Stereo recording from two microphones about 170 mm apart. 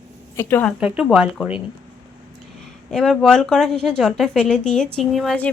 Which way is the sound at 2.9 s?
5° left (ahead or behind).